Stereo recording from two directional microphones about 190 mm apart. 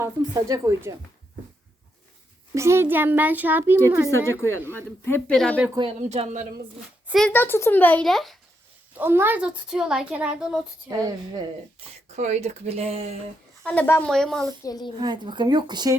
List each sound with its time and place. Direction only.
0.0 s a child's voice: 15° right (ahead or behind)
2.6 s a child's voice: 15° right (ahead or behind)
5.0 s speech: 5° left (ahead or behind)
5.7 s speech: 25° right (ahead or behind)
7.1 s speech: 5° left (ahead or behind)
9.0 s a woman's voice: 10° right (ahead or behind)
10.8 s speech: 20° right (ahead or behind)
12.1 s speech: 35° right (ahead or behind)
13.7 s speech: 10° left (ahead or behind)
14.6 s a woman's voice: 20° left (ahead or behind)
14.9 s speech: 25° right (ahead or behind)